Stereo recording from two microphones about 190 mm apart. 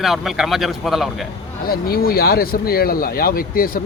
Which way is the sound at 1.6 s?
55° left (ahead or behind).